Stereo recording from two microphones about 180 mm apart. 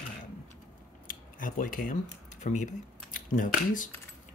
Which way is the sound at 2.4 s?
40° left (ahead or behind).